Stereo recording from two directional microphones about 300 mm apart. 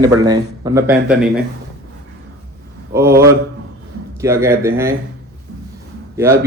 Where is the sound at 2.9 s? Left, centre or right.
Centre.